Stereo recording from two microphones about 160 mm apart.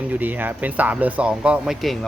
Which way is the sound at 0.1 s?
10° right (ahead or behind).